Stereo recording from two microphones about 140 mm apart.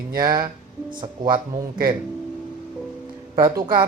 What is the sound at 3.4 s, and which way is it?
Speech, 30° right (ahead or behind).